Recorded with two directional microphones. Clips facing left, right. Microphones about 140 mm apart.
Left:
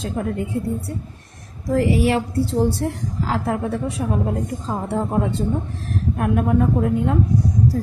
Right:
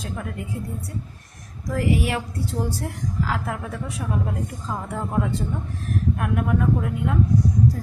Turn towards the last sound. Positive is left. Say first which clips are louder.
# left 1 dB
turn(degrees=35)  # may be behind; listen again after turning